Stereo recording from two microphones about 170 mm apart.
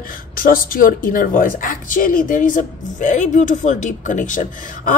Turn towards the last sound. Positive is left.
turn(degrees=50)  # may be behind; listen again after turning